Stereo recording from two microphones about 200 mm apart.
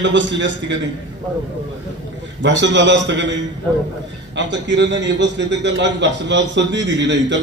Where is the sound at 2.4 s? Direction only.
65° right (ahead or behind).